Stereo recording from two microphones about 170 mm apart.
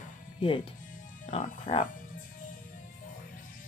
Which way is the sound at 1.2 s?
45° left (ahead or behind).